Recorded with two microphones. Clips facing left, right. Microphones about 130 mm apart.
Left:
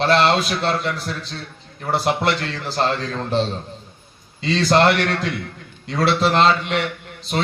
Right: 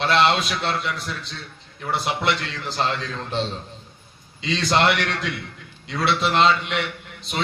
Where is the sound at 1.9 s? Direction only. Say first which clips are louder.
Left 4 dB; 40° left (ahead or behind).